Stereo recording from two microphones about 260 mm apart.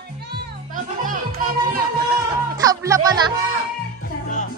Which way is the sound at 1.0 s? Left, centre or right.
Right.